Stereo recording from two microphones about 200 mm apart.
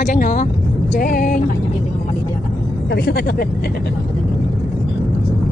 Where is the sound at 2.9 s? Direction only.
50° left (ahead or behind).